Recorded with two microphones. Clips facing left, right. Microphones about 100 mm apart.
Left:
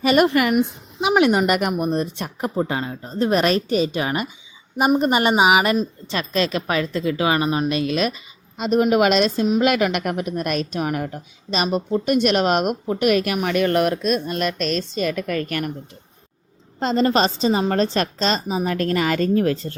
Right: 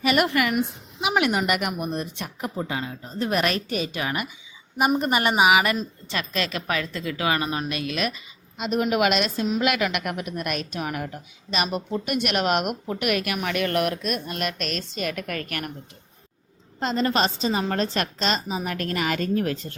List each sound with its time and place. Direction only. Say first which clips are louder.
0.0 s a woman's voice: left 5 dB; 30° left (ahead or behind)
16.8 s a woman's voice: left 5 dB; 30° left (ahead or behind)